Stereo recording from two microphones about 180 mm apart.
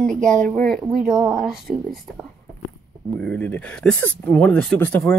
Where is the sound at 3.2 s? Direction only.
5° left (ahead or behind).